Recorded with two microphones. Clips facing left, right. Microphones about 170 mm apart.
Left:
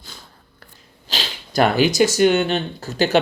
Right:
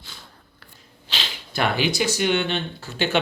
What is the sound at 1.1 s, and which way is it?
Speech, 40° left (ahead or behind).